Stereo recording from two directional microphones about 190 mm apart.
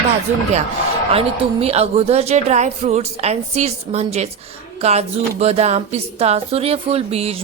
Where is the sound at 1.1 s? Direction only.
30° right (ahead or behind).